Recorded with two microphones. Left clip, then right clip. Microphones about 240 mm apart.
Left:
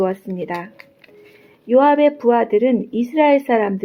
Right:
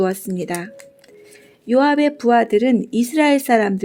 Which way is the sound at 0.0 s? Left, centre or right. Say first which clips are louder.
Even; right.